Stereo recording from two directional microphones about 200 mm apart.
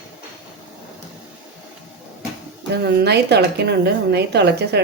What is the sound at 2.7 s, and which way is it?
A woman's voice, 55° right (ahead or behind).